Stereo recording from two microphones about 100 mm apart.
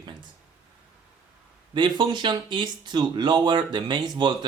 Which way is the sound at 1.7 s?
50° right (ahead or behind).